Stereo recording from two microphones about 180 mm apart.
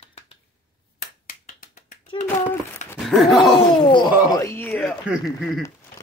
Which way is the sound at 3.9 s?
25° left (ahead or behind).